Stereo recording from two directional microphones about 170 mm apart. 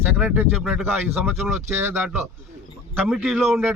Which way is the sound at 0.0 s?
10° right (ahead or behind).